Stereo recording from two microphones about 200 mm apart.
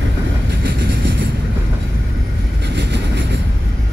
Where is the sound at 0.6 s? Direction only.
50° right (ahead or behind).